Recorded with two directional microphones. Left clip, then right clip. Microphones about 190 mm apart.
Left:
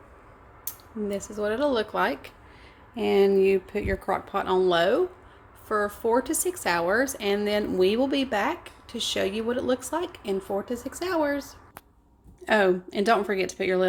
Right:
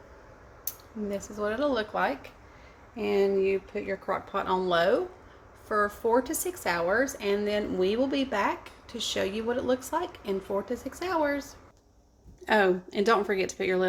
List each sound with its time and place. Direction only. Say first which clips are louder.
0.6 s a woman's voice: left 4 dB; 20° left (ahead or behind)